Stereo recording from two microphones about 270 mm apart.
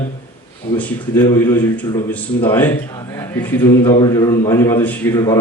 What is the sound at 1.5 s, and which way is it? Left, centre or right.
A man's voice, centre.